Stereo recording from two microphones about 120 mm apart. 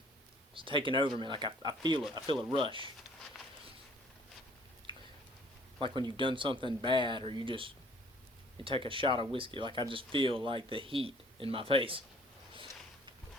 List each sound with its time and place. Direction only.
0.5 s speech: 45° right (ahead or behind)
5.8 s speech: 40° right (ahead or behind)